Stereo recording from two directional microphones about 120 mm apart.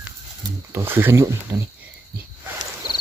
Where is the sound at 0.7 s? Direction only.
20° right (ahead or behind).